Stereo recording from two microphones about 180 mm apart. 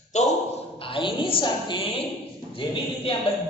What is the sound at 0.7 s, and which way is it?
A woman's voice, 30° left (ahead or behind).